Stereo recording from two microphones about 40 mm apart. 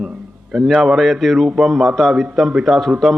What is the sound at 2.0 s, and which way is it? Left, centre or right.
Speech, centre.